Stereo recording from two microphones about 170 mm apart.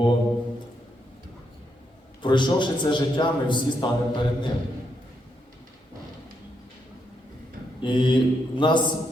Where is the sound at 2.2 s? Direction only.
25° left (ahead or behind).